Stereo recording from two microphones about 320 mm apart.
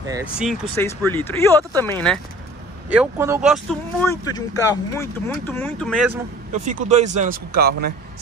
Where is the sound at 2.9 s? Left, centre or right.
Centre.